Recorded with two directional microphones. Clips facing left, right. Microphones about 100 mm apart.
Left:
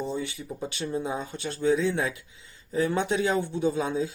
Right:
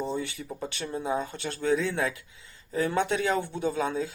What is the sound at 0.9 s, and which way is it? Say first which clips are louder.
Speech: right 1 dB; 30° right (ahead or behind).